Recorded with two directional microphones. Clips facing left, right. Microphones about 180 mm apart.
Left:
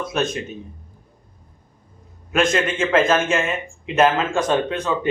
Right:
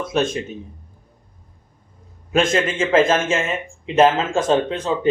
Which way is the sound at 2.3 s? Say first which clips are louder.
Right 1 dB; 30° right (ahead or behind).